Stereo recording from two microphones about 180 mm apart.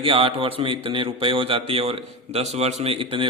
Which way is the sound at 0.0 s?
30° right (ahead or behind).